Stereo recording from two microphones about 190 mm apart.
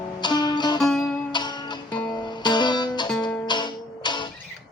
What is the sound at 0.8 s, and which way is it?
Music, centre (ahead or behind).